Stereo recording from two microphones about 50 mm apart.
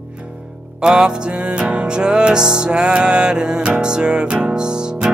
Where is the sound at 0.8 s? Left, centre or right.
Centre.